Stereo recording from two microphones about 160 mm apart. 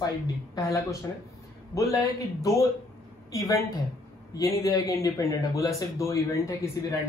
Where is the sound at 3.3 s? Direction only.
25° left (ahead or behind).